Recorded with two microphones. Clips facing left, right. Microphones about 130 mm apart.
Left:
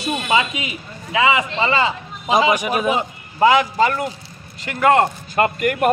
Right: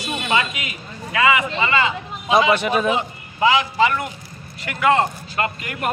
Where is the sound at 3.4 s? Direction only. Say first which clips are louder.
Left 3 dB; 50° left (ahead or behind).